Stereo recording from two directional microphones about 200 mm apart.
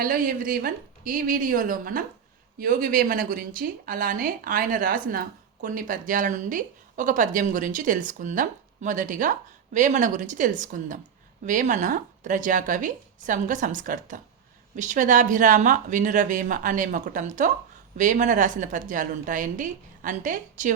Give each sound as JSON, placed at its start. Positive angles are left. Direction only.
{"t": 0.0, "sound": "a woman's voice", "side_deg": -45}